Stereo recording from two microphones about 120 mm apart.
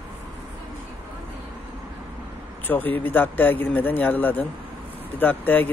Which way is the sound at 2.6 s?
15° left (ahead or behind).